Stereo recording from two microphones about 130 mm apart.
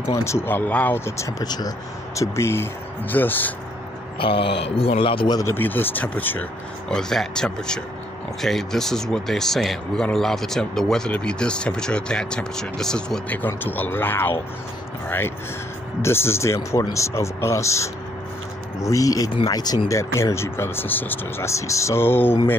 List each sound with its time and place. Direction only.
0.0 s speech: 20° left (ahead or behind)
4.2 s a man's voice: 40° left (ahead or behind)
5.4 s speech: 15° left (ahead or behind)